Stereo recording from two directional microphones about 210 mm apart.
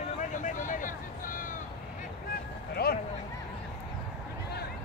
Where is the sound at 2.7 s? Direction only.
50° left (ahead or behind).